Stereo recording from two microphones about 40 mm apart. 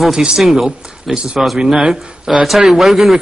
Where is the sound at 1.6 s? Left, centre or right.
Centre.